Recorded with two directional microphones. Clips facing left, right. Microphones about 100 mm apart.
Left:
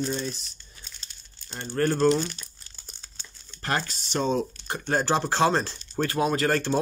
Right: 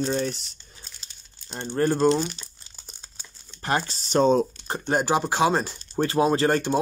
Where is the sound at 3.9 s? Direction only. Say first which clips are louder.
Right 10 dB; 45° right (ahead or behind).